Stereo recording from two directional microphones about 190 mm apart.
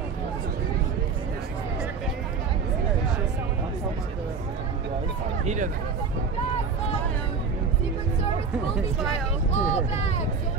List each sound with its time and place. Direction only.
5.4 s speech: 40° right (ahead or behind)
9.5 s vehicle: 35° left (ahead or behind)